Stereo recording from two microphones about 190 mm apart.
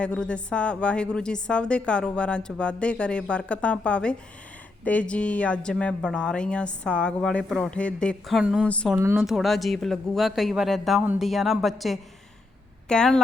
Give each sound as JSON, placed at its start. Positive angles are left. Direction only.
{"t": 0.0, "sound": "a woman's voice", "side_deg": 5}
{"t": 9.0, "sound": "speech", "side_deg": -15}
{"t": 9.2, "sound": "a woman's voice", "side_deg": 0}